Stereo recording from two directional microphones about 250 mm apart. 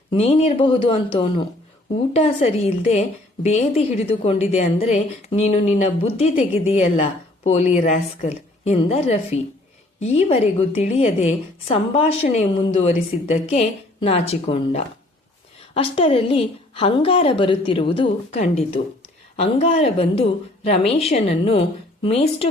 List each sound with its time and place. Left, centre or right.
0.1 s a woman's voice: left